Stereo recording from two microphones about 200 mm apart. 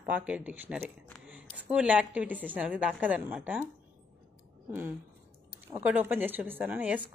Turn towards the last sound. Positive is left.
turn(degrees=-10)  # may be behind; listen again after turning